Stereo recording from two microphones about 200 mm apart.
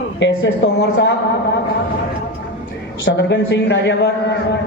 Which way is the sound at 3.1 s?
60° left (ahead or behind).